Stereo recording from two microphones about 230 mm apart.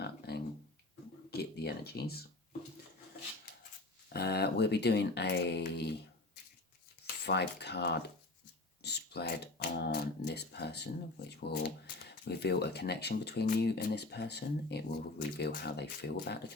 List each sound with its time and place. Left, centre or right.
0.0 s a sound: left
1.3 s speech: left
4.1 s speech: left
7.3 s speech: left